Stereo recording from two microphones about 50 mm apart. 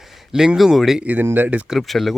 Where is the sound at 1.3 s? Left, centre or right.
Right.